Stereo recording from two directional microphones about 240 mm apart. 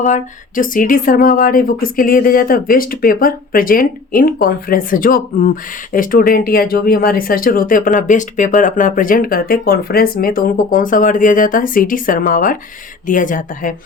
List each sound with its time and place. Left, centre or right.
0.0 s speech: left